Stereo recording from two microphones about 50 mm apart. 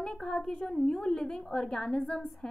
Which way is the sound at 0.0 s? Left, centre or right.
Centre.